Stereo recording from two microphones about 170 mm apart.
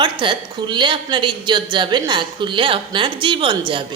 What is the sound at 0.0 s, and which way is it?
A woman's voice, 25° right (ahead or behind).